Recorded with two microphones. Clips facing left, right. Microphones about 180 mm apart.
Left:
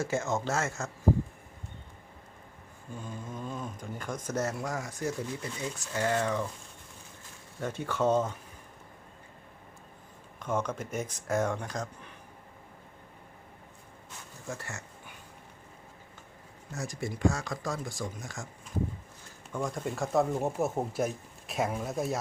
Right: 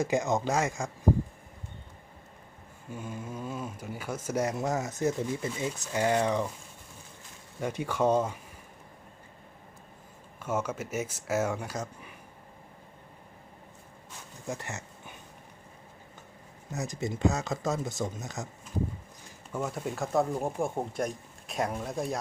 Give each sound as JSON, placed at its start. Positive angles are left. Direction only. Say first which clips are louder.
{"t": 0.0, "sound": "speech", "louder": "right 3 dB", "side_deg": -15}
{"t": 2.9, "sound": "speech", "louder": "right 2 dB", "side_deg": -10}
{"t": 7.6, "sound": "speech", "louder": "right 2 dB", "side_deg": -10}
{"t": 10.4, "sound": "speech", "louder": "even", "side_deg": -5}
{"t": 14.4, "sound": "a sound", "louder": "right 3 dB", "side_deg": -20}
{"t": 16.7, "sound": "speech", "louder": "right 3 dB", "side_deg": -20}
{"t": 19.5, "sound": "speech", "louder": "even", "side_deg": -5}